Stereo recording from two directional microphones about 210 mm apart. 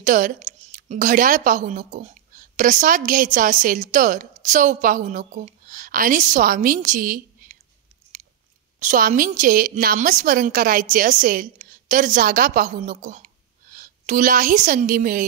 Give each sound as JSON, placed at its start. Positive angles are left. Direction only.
{"t": 0.0, "sound": "a woman's voice", "side_deg": -40}
{"t": 8.7, "sound": "a woman's voice", "side_deg": -40}